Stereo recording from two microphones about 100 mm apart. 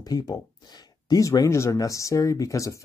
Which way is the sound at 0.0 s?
40° left (ahead or behind).